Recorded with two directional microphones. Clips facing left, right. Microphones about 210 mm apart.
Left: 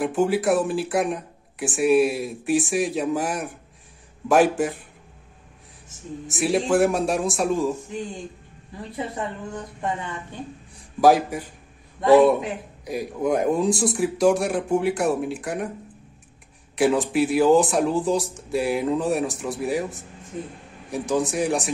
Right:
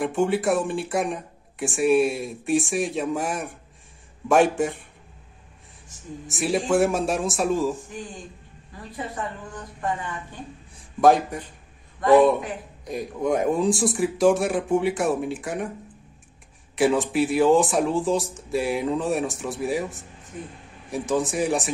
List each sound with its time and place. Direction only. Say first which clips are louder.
0.0 s speech: left 1 dB; centre (ahead or behind)
6.2 s speech: left 2 dB; centre (ahead or behind)
8.9 s a woman's voice: left 2 dB; 25° left (ahead or behind)
10.8 s a man's voice: left 1 dB; 5° left (ahead or behind)
16.7 s speech: left 1 dB; centre (ahead or behind)